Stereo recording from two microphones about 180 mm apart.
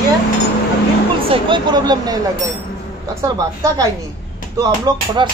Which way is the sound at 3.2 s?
20° right (ahead or behind).